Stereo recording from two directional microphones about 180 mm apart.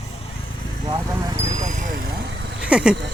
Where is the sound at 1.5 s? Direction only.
40° right (ahead or behind); by 2.6 s 70° right (ahead or behind).